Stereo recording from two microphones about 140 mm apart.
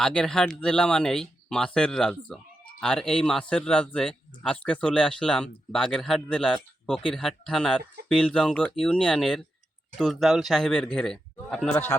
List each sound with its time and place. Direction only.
0.0 s a man's voice: 5° left (ahead or behind)